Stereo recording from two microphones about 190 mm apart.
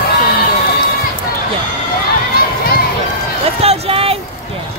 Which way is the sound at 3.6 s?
30° right (ahead or behind).